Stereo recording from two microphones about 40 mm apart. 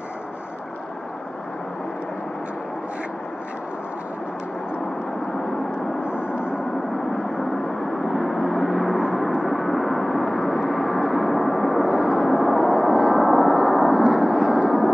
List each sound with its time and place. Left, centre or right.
6.0 s gong: left
8.0 s vehicle: centre
9.1 s gong: centre
11.9 s vehicle: centre
12.4 s gong: centre
14.0 s vehicle: centre